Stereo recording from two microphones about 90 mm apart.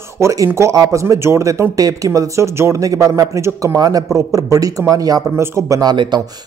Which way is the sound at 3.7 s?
45° right (ahead or behind).